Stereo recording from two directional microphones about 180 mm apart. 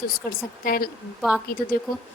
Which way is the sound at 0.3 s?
55° left (ahead or behind).